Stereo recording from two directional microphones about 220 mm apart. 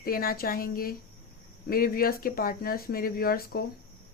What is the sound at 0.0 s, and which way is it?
Speech, 40° left (ahead or behind).